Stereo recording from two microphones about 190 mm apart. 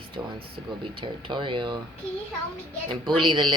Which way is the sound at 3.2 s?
25° right (ahead or behind).